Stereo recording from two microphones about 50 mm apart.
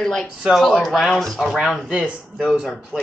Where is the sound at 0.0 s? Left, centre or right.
Centre.